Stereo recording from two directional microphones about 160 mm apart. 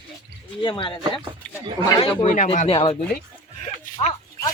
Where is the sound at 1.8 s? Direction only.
30° left (ahead or behind).